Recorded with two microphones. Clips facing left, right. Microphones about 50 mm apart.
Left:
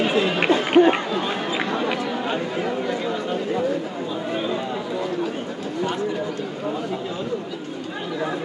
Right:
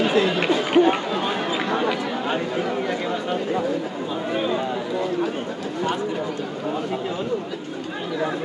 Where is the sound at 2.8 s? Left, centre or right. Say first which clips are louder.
Even; right.